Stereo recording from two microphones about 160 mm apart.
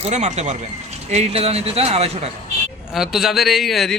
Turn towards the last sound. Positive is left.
turn(degrees=0)  # may be behind; listen again after turning